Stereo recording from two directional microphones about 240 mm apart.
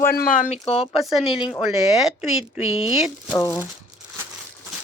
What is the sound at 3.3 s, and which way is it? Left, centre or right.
Speech, centre.